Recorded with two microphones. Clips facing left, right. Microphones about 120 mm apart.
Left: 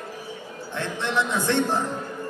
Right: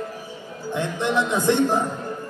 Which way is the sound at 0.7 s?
15° right (ahead or behind).